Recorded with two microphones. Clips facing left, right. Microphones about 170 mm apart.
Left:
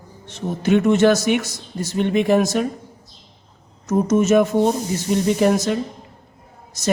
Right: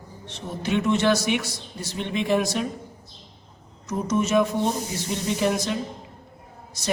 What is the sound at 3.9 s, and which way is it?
A man's voice, 45° left (ahead or behind).